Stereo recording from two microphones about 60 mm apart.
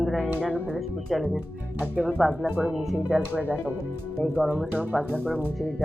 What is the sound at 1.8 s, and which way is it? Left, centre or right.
Speech, right.